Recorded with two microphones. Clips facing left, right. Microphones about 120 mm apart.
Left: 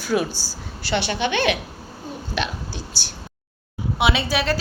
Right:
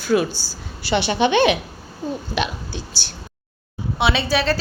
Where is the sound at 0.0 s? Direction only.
5° left (ahead or behind).